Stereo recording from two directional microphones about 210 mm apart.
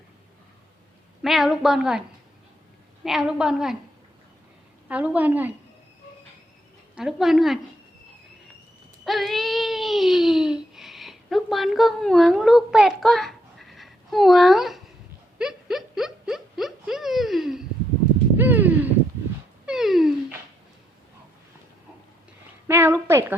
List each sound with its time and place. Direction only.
1.2 s a woman's voice: centre (ahead or behind)
4.9 s a woman's voice: 5° right (ahead or behind)
6.9 s a woman's voice: centre (ahead or behind)
9.0 s a sound: centre (ahead or behind)
22.6 s a woman's voice: 10° right (ahead or behind)